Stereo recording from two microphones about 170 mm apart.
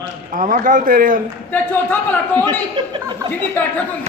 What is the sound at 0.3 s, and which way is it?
Speech, 50° right (ahead or behind).